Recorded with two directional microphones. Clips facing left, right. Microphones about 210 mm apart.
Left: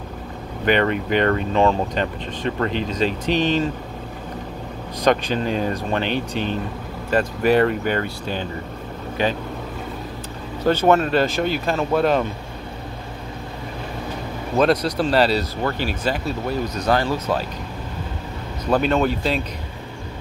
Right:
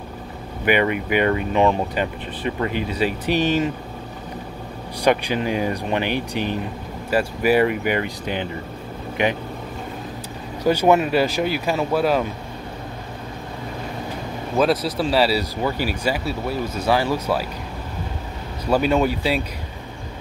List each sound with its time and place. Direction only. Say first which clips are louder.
0.7 s speech: even; 10° right (ahead or behind)
5.0 s speech: even; 10° right (ahead or behind)
10.6 s speech: even; 10° right (ahead or behind)
14.6 s speech: left 1 dB; 5° right (ahead or behind)
18.7 s speech: even; 10° right (ahead or behind)